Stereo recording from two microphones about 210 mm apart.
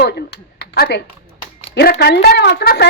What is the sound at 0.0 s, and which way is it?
A woman's voice, 50° left (ahead or behind).